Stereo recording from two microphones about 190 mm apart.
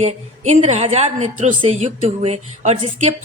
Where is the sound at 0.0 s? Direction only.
35° right (ahead or behind).